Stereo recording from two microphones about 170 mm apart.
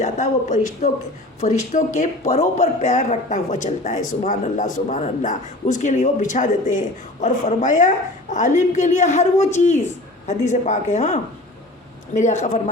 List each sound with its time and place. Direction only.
0.0 s speech: 45° left (ahead or behind)